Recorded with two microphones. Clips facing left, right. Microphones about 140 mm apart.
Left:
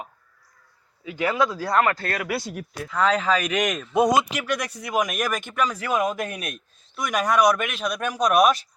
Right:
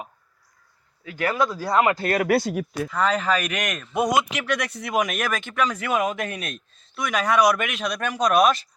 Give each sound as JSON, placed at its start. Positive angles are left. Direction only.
{"t": 1.3, "sound": "speech", "side_deg": -5}
{"t": 2.4, "sound": "speech", "side_deg": -90}
{"t": 2.9, "sound": "speech", "side_deg": -5}
{"t": 3.9, "sound": "a man's voice", "side_deg": 25}
{"t": 4.3, "sound": "speech", "side_deg": 0}